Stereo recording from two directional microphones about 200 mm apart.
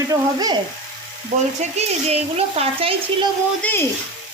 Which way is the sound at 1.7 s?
30° right (ahead or behind).